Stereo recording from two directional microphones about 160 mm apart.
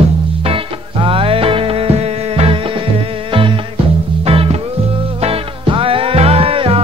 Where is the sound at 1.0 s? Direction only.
35° right (ahead or behind).